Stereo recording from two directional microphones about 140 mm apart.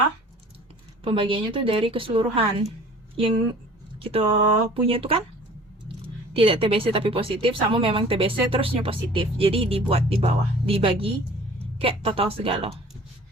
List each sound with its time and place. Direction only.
1.0 s speech: 40° right (ahead or behind)
4.0 s speech: 40° right (ahead or behind)
6.3 s speech: 40° right (ahead or behind)